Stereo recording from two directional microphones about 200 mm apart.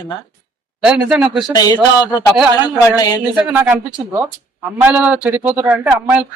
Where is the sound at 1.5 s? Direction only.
20° left (ahead or behind).